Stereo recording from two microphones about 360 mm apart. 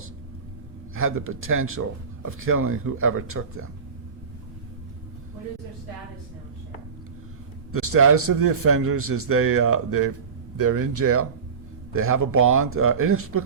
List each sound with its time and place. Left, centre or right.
0.9 s speech: right
7.7 s speech: right